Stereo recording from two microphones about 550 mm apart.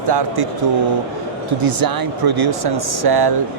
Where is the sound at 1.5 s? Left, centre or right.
Right.